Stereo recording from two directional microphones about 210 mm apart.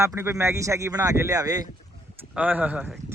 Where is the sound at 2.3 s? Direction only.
5° right (ahead or behind).